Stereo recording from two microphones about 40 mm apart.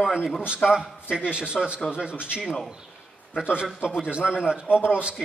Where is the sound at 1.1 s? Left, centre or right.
Right.